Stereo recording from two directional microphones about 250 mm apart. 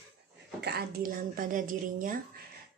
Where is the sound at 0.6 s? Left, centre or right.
Right.